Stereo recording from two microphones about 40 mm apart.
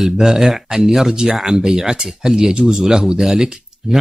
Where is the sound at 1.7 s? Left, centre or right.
Centre.